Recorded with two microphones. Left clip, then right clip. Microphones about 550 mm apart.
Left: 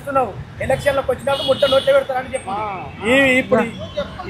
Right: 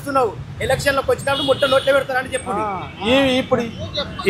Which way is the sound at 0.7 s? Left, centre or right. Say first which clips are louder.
Even; right.